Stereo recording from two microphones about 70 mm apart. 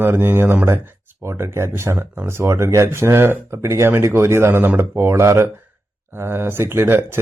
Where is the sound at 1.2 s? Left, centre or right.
Right.